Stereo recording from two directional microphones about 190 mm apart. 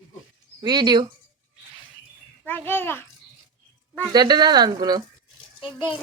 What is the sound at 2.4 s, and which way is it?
Speech, 10° left (ahead or behind).